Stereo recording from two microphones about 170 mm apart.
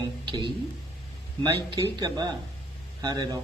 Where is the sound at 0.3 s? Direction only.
25° right (ahead or behind).